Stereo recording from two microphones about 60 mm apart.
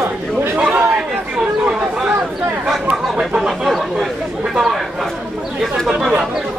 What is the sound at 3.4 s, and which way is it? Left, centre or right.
Chatter, centre.